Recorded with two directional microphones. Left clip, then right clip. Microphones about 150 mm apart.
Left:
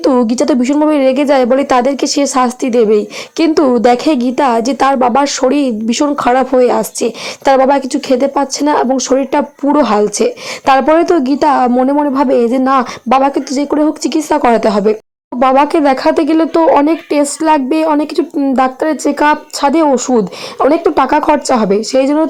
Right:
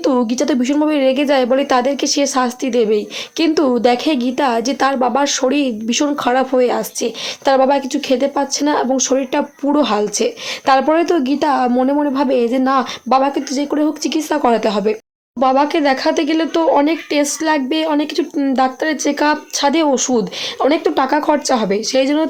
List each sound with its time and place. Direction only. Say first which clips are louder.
0.0 s a woman's voice: left 5 dB; 40° left (ahead or behind)
11.7 s a woman's voice: left 4 dB; 30° left (ahead or behind)